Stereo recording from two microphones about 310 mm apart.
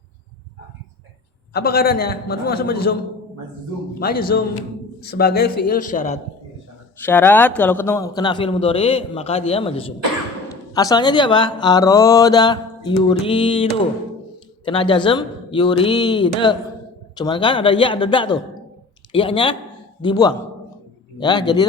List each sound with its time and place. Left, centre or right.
1.5 s a man's voice: left
4.0 s a man's voice: left
7.0 s speech: centre